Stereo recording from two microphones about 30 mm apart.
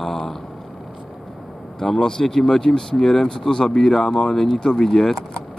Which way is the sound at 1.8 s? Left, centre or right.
Centre.